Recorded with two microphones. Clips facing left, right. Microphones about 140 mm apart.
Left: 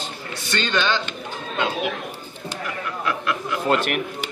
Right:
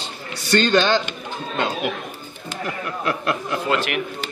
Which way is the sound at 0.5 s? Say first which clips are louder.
Right 6 dB; 40° right (ahead or behind).